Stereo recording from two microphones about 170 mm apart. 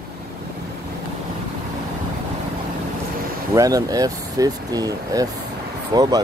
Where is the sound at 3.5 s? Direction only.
20° right (ahead or behind).